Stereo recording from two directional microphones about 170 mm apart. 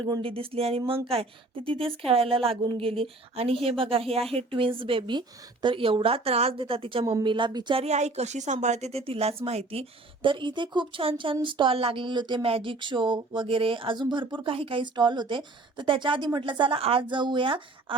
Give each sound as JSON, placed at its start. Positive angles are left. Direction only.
{"t": 0.0, "sound": "a woman's voice", "side_deg": -30}